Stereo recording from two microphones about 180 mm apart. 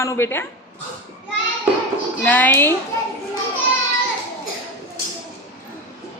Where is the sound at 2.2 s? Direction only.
10° left (ahead or behind).